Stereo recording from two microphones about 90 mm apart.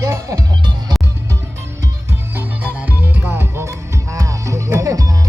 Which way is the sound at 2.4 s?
20° right (ahead or behind).